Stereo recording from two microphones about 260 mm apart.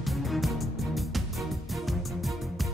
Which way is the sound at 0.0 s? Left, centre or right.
Centre.